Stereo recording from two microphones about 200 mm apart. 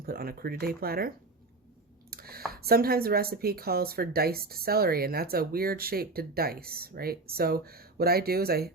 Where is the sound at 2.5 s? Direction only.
50° right (ahead or behind).